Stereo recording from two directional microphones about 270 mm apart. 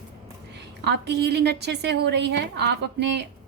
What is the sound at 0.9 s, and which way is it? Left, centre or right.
A woman's voice, right.